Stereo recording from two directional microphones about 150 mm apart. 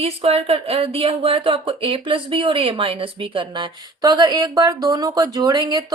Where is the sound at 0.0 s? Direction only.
45° right (ahead or behind).